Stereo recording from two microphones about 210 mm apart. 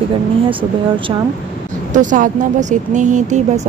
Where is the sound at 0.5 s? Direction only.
25° right (ahead or behind).